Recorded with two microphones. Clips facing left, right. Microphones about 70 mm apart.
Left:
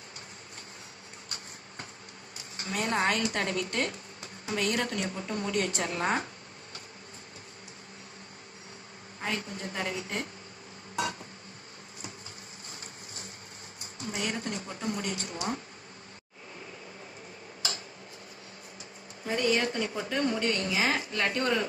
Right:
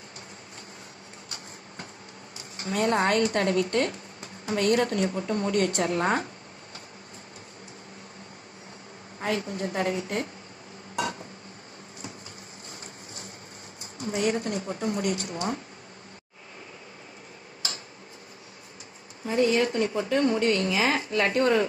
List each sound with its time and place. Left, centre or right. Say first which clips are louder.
2.6 s speech: right 5 dB; right
9.2 s speech: right 6 dB; right
14.0 s speech: right 7 dB; right
19.5 s a woman's voice: right 5 dB; right